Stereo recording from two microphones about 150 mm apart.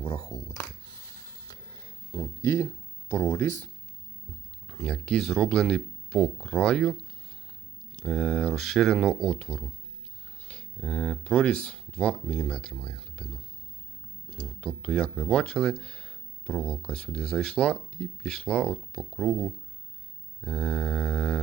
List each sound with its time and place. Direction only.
0.0 s speech: 30° left (ahead or behind)
0.9 s a sound: 25° left (ahead or behind)
4.6 s speech: centre (ahead or behind)